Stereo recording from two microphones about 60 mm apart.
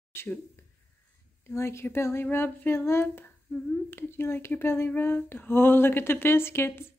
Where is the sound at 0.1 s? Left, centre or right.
Left.